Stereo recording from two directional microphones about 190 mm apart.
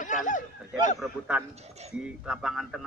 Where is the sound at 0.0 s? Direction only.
40° left (ahead or behind).